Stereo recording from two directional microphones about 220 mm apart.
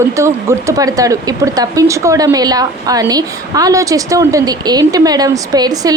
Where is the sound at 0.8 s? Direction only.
15° right (ahead or behind).